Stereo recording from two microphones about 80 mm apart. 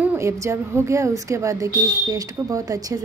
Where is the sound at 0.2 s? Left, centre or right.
Right.